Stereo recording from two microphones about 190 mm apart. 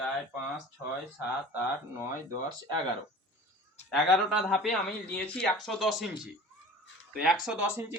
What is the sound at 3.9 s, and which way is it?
Speech, centre (ahead or behind).